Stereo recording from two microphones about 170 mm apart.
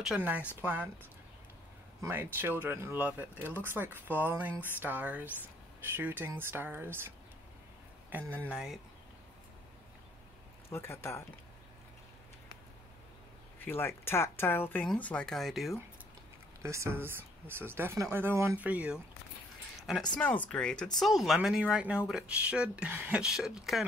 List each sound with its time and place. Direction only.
0.0 s speech: 5° right (ahead or behind)
2.0 s speech: 15° right (ahead or behind)
8.1 s speech: 10° right (ahead or behind)
10.7 s speech: 15° left (ahead or behind)
13.6 s speech: 15° left (ahead or behind)
16.6 s speech: 15° right (ahead or behind)
20.2 s speech: 10° left (ahead or behind)